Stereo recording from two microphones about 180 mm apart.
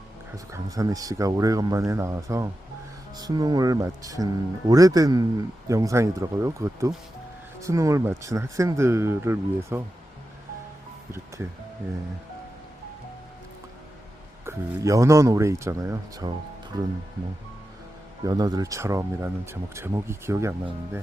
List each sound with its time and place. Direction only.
0.5 s speech: 20° right (ahead or behind)
14.4 s speech: 15° right (ahead or behind)
18.3 s speech: 20° right (ahead or behind)